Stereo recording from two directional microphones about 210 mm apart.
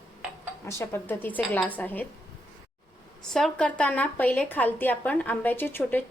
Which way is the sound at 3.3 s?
5° left (ahead or behind).